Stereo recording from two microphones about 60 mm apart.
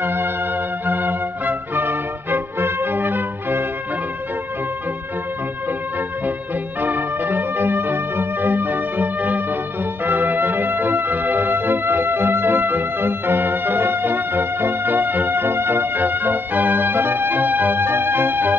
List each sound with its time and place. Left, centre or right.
0.0 s music: right
6.8 s music: right